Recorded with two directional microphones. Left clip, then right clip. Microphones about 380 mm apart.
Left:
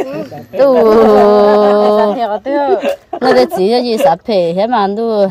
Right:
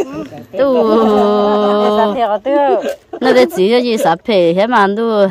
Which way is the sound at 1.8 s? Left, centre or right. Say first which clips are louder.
Left 2 dB; centre.